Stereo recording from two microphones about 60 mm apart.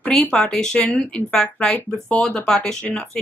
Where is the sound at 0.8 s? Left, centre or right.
Left.